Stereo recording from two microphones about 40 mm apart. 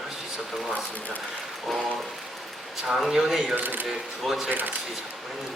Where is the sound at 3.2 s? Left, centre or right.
Centre.